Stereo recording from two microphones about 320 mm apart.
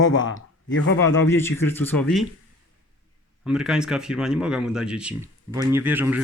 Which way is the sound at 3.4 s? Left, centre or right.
Centre.